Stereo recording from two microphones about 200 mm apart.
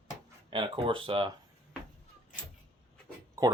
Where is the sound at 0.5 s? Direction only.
25° right (ahead or behind).